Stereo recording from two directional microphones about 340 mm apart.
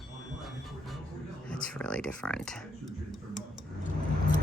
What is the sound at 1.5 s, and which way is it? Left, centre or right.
Speech, centre.